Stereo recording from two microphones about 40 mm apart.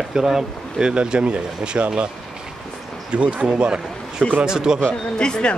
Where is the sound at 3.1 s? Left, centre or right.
Right.